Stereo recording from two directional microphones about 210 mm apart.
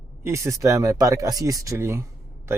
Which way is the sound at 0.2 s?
15° right (ahead or behind).